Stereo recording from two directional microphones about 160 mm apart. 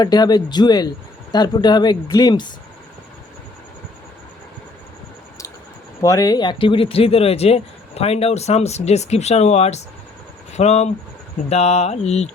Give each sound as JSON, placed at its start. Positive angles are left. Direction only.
{"t": 0.0, "sound": "speech", "side_deg": 25}
{"t": 6.0, "sound": "speech", "side_deg": 20}